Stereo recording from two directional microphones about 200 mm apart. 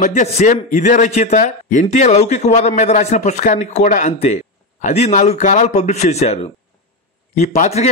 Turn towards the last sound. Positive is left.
turn(degrees=35)  # may be behind; listen again after turning